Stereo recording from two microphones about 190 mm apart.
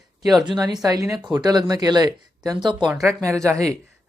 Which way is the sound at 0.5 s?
20° right (ahead or behind).